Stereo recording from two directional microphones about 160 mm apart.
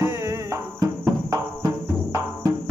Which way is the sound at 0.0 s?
15° right (ahead or behind).